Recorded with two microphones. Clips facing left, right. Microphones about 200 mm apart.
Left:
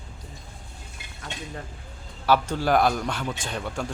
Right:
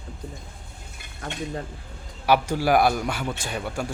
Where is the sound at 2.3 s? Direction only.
10° right (ahead or behind).